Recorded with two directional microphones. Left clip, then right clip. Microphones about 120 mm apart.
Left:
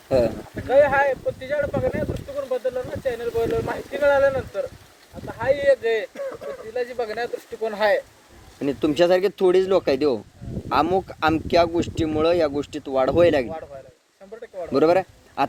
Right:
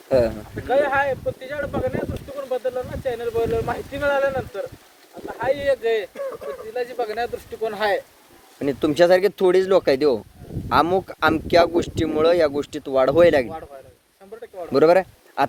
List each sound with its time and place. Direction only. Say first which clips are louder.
0.1 s speech: right 1 dB; 55° right (ahead or behind)
0.7 s speech: left 2 dB; 30° right (ahead or behind)
2.5 s a sound: right 1 dB; 30° right (ahead or behind)
3.7 s speech: left 2 dB; 30° right (ahead or behind)
6.1 s speech: right 1 dB; 10° right (ahead or behind)
6.5 s speech: even; 35° right (ahead or behind)
8.5 s speech: right 2 dB; 55° right (ahead or behind)
14.7 s speech: right 3 dB; 60° right (ahead or behind)